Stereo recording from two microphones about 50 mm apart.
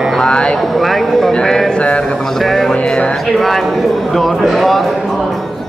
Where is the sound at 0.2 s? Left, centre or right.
Centre.